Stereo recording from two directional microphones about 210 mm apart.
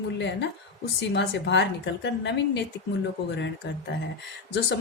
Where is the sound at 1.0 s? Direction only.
55° left (ahead or behind).